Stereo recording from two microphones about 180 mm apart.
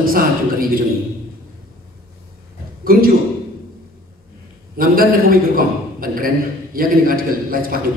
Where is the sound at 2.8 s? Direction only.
55° right (ahead or behind).